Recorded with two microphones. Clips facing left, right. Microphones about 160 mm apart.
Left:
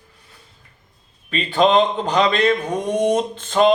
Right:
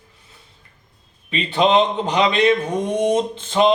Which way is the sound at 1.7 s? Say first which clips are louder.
Even; 15° right (ahead or behind).